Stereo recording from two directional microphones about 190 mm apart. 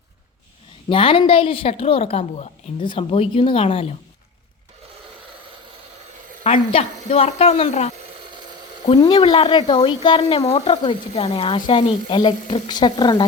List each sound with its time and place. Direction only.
0.9 s speech: 30° left (ahead or behind)
6.4 s speech: 35° left (ahead or behind)
9.0 s speech: 25° left (ahead or behind)